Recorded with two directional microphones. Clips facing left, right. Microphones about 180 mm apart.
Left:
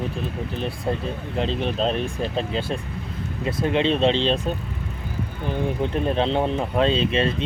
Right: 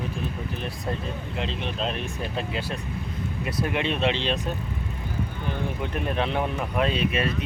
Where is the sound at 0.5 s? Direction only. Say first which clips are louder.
Left 5 dB; 30° left (ahead or behind).